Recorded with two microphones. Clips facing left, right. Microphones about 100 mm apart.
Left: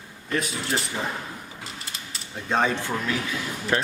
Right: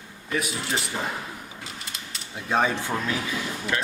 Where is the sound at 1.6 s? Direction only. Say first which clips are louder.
Even; centre (ahead or behind).